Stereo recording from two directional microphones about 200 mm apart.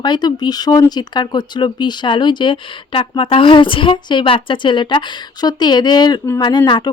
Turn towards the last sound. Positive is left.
turn(degrees=20)  # may be behind; listen again after turning